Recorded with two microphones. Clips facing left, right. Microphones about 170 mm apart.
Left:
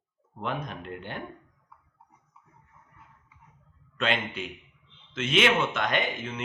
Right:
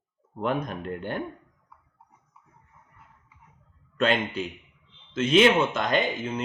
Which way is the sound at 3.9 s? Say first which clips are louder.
Right 5 dB; 40° right (ahead or behind).